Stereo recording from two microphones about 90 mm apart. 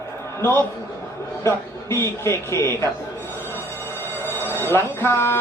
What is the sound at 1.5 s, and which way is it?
A man's voice, 30° left (ahead or behind).